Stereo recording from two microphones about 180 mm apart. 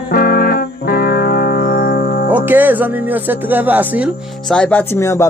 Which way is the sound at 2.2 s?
10° right (ahead or behind).